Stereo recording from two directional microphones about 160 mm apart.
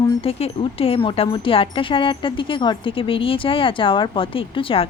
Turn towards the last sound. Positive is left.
turn(degrees=35)  # may be behind; listen again after turning